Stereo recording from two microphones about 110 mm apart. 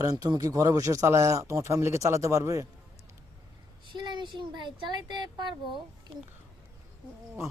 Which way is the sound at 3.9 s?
45° right (ahead or behind).